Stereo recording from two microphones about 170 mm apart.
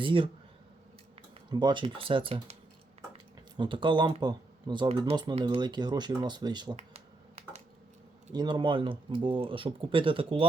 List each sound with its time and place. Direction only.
0.0 s speech: 30° right (ahead or behind)
1.5 s speech: 25° right (ahead or behind)
3.6 s speech: 30° right (ahead or behind)
6.7 s finger snapping: 40° right (ahead or behind)
8.3 s speech: 25° right (ahead or behind)